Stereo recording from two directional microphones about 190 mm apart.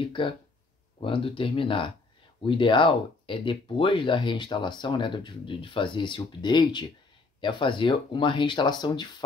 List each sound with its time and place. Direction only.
0.0 s speech: 25° left (ahead or behind)